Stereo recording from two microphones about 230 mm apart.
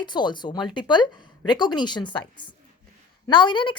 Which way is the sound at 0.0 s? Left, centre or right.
Centre.